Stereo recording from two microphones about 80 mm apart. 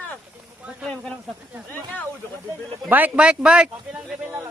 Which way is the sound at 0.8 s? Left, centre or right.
Centre.